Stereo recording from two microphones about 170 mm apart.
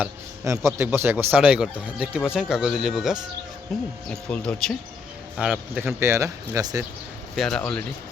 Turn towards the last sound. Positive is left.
turn(degrees=5)  # may be behind; listen again after turning